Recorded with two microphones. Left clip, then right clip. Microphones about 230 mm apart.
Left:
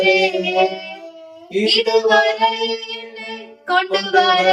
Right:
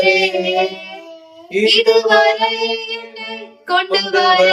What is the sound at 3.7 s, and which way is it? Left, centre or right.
Mantra, centre.